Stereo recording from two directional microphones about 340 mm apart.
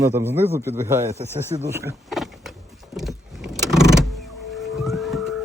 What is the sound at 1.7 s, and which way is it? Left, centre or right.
Power windows, centre.